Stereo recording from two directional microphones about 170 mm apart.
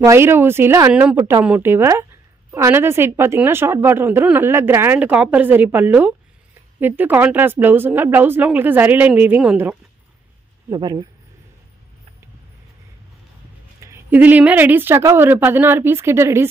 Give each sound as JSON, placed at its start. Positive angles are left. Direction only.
{"t": 0.0, "sound": "a woman's voice", "side_deg": -15}
{"t": 10.7, "sound": "speech", "side_deg": -25}
{"t": 13.8, "sound": "a woman's voice", "side_deg": -10}